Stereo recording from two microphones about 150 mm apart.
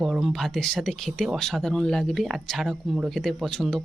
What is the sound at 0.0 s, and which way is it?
Speech, centre (ahead or behind).